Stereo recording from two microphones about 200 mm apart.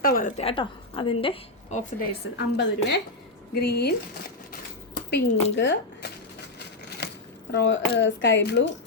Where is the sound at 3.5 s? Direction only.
55° left (ahead or behind).